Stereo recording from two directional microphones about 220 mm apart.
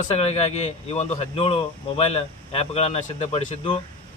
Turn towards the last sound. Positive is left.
turn(degrees=25)  # may be behind; listen again after turning